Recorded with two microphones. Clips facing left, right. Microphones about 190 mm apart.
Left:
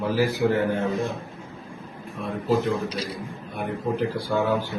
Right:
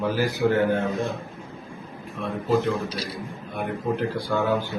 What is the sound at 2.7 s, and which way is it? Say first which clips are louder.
Speech: even; 15° left (ahead or behind).